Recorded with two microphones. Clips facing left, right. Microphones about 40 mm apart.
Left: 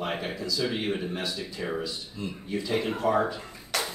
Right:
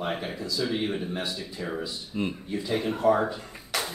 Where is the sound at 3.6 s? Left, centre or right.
Centre.